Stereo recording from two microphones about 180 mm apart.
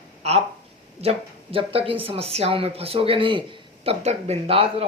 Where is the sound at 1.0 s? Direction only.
35° right (ahead or behind).